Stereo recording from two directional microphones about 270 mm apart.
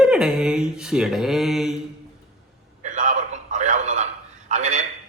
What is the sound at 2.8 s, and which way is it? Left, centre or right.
A man's voice, right.